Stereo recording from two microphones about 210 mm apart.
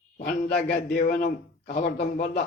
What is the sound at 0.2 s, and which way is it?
A man's voice, 50° left (ahead or behind).